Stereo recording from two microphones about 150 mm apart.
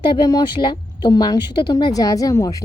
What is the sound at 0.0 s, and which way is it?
A woman's voice, 30° left (ahead or behind).